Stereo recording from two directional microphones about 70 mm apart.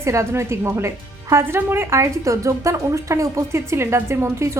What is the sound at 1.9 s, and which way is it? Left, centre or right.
A woman's voice, right.